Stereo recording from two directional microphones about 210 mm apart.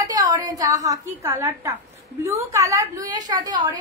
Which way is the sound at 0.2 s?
15° right (ahead or behind).